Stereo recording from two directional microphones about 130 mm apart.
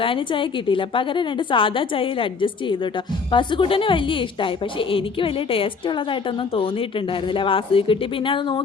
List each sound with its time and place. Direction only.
0.0 s a woman's voice: 40° left (ahead or behind)